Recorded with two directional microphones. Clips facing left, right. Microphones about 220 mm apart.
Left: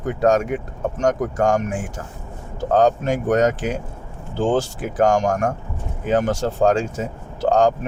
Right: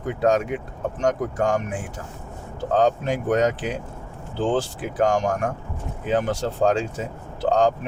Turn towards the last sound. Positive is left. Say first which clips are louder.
# left 3 dB
turn(degrees=45)  # may be behind; listen again after turning